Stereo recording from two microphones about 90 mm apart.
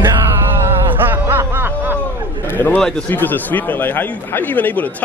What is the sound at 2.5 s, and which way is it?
Speech, 20° left (ahead or behind).